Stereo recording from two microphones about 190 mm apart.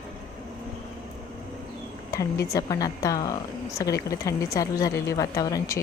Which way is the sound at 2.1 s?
15° left (ahead or behind).